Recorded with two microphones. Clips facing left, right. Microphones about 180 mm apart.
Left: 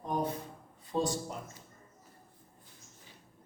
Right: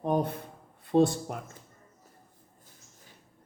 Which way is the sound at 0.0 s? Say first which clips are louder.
Right 6 dB; 60° right (ahead or behind).